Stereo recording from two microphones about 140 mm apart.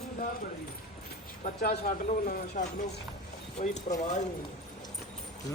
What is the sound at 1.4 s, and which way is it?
Speech, 90° left.